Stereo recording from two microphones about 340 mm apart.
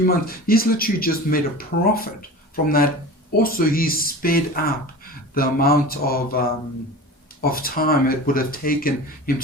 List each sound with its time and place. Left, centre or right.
0.0 s speech: left